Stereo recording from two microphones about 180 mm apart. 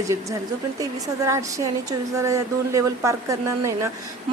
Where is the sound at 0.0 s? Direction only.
15° right (ahead or behind).